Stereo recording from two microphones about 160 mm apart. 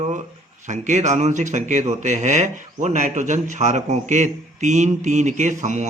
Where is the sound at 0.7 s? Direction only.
45° right (ahead or behind).